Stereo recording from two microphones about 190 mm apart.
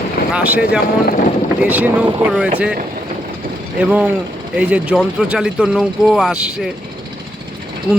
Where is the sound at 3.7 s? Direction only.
10° right (ahead or behind).